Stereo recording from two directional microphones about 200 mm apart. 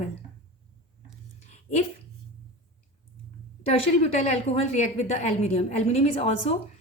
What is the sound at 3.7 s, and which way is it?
A woman's voice, 35° left (ahead or behind).